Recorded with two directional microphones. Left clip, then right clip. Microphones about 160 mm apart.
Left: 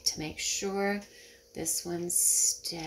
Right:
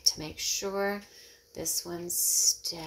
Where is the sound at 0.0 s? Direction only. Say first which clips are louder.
Right 3 dB; 15° left (ahead or behind).